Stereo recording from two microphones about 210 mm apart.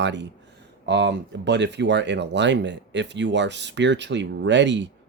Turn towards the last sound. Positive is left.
turn(degrees=-60)  # may be behind; listen again after turning